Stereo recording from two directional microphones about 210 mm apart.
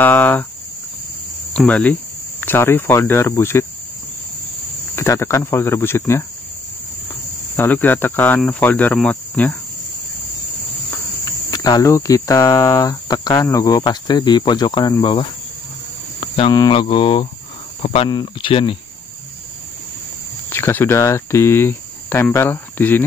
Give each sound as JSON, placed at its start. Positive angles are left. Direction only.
{"t": 0.0, "sound": "speech", "side_deg": 10}
{"t": 1.5, "sound": "cricket", "side_deg": 5}
{"t": 2.4, "sound": "speech", "side_deg": 10}
{"t": 4.9, "sound": "speech", "side_deg": 15}
{"t": 7.5, "sound": "speech", "side_deg": 10}
{"t": 11.2, "sound": "speech", "side_deg": 15}
{"t": 20.4, "sound": "speech", "side_deg": 10}